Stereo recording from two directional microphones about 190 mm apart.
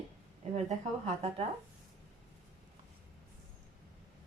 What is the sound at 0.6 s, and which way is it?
Speech, 35° right (ahead or behind).